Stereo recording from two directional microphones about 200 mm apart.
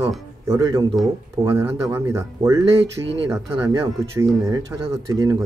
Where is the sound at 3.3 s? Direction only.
15° right (ahead or behind).